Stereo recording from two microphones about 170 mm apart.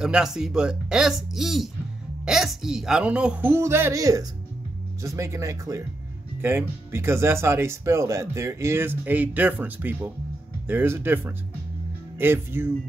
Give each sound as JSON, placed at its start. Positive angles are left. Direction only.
{"t": 0.0, "sound": "speech", "side_deg": -5}